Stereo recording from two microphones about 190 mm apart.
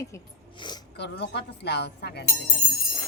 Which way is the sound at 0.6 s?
25° left (ahead or behind).